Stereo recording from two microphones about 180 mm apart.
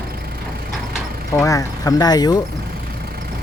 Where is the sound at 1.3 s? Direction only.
15° left (ahead or behind).